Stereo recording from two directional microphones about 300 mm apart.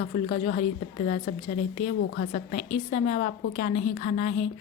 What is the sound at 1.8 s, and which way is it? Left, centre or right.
A woman's voice, left.